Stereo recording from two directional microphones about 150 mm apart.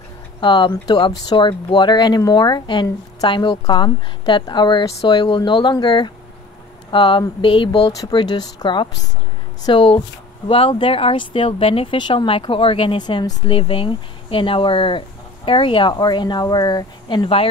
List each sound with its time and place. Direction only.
0.4 s speech: 30° left (ahead or behind)